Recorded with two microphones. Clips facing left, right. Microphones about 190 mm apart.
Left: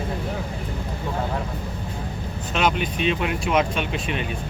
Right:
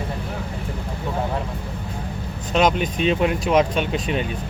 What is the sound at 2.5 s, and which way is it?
Speech, 40° right (ahead or behind).